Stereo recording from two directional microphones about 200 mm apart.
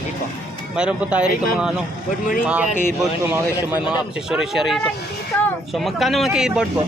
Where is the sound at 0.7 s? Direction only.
5° right (ahead or behind).